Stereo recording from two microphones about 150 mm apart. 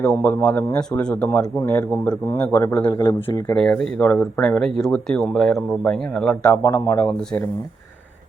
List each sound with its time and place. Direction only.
0.0 s speech: 5° left (ahead or behind)
2.9 s speech: 25° left (ahead or behind)
3.5 s speech: 5° left (ahead or behind)